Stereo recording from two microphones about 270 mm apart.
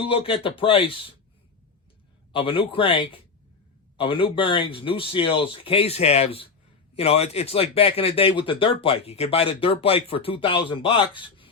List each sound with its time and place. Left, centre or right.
0.1 s speech: centre
2.3 s speech: centre